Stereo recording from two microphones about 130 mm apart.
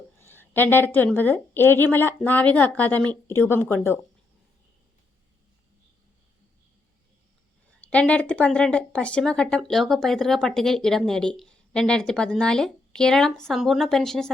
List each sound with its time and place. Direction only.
0.2 s a woman's voice: 15° left (ahead or behind)
7.8 s speech: 10° left (ahead or behind)